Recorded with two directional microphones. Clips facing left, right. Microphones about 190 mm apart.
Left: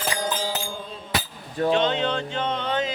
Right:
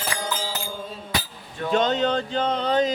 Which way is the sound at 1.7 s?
40° right (ahead or behind).